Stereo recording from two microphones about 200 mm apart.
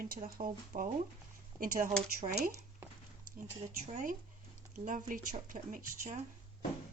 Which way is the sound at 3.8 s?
40° right (ahead or behind).